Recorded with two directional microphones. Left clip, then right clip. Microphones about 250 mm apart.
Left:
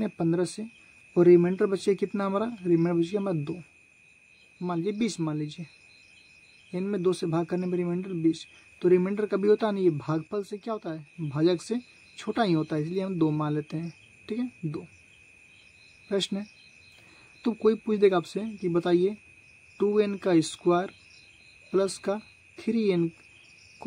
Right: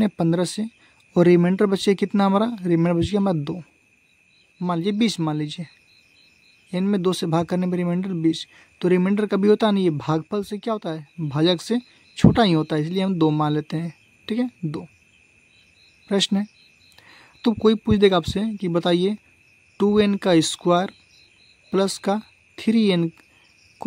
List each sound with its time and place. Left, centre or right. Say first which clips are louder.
0.0 s a man's voice: right 5 dB; right
4.6 s a man's voice: right 6 dB; right
6.7 s a man's voice: right 5 dB; right
16.1 s a man's voice: right 7 dB; right